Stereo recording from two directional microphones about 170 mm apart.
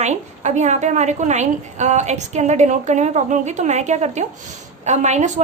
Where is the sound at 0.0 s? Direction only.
45° right (ahead or behind).